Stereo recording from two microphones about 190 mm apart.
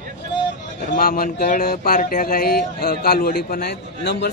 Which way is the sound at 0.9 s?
50° left (ahead or behind).